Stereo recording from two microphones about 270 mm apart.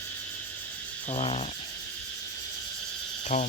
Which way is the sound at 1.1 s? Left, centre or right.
Centre.